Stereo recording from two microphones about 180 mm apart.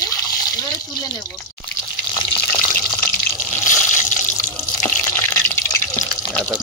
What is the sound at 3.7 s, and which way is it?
Water, 45° left (ahead or behind).